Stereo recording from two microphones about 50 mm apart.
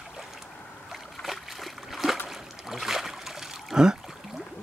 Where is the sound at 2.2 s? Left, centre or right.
Centre.